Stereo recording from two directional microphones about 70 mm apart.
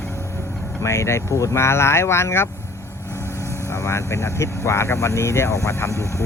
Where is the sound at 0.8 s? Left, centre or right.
Left.